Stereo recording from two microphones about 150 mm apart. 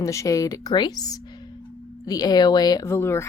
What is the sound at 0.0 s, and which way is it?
Speech, 20° left (ahead or behind).